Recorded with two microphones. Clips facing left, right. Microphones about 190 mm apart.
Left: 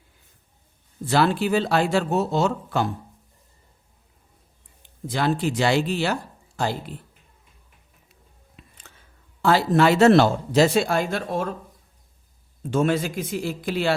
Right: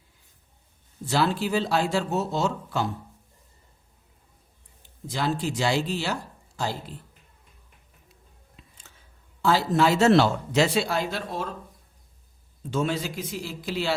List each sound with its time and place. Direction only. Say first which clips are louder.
1.0 s speech: left 4 dB; 60° left (ahead or behind)
4.8 s speech: left 4 dB; 55° left (ahead or behind)
8.6 s a sound: left 4 dB; 60° left (ahead or behind)
9.4 s speech: left 3 dB; 60° left (ahead or behind)
10.3 s speech: left 4 dB; 40° left (ahead or behind)
12.7 s speech: left 5 dB; 50° left (ahead or behind)